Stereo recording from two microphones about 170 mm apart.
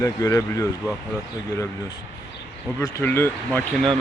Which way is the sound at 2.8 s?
15° left (ahead or behind).